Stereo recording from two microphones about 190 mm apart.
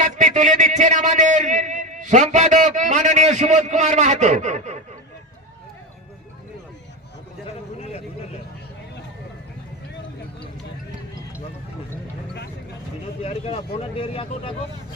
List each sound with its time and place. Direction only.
0.0 s a man's voice: 40° right (ahead or behind)
13.2 s speech: 30° left (ahead or behind)